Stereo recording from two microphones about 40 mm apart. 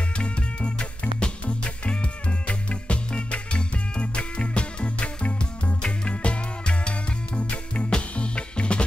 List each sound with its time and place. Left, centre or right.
0.2 s music: left